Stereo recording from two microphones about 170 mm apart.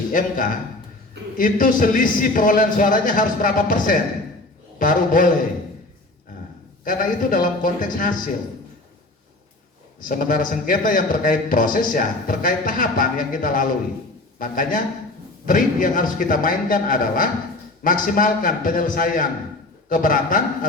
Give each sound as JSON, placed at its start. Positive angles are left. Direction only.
{"t": 0.1, "sound": "a man's voice", "side_deg": 55}
{"t": 6.8, "sound": "a man's voice", "side_deg": 55}
{"t": 10.0, "sound": "a man's voice", "side_deg": 55}